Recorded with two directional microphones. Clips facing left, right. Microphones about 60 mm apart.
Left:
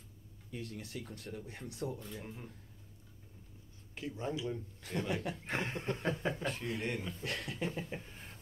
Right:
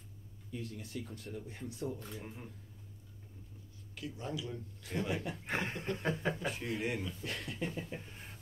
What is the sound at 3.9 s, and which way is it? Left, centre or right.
Speech, left.